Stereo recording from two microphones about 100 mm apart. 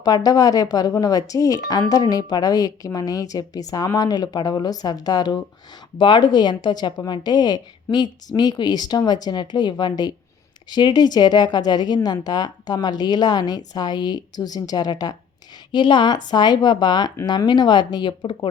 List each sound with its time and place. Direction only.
0.0 s a woman's voice: 40° left (ahead or behind)